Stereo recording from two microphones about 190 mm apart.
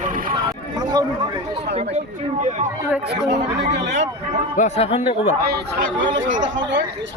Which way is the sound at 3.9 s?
40° right (ahead or behind).